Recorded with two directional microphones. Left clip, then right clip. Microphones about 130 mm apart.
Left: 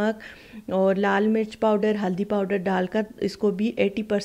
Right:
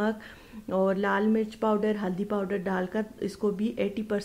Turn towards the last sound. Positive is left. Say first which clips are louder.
# left 6 dB
turn(degrees=25)  # may be behind; listen again after turning